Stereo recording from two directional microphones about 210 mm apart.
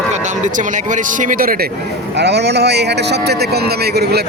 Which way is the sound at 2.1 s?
55° right (ahead or behind).